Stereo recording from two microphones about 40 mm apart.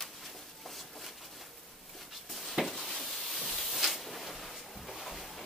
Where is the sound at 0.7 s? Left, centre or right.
Centre.